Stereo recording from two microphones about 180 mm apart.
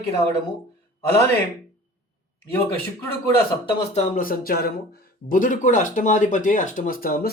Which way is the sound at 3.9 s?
50° left (ahead or behind).